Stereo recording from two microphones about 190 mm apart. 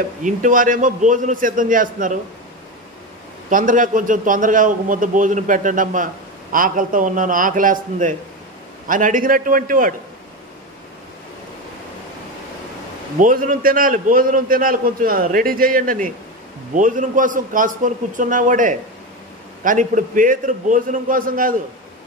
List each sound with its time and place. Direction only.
0.2 s a man's voice: 45° right (ahead or behind)
3.4 s a man's voice: 45° right (ahead or behind)
13.2 s a man's voice: 45° right (ahead or behind)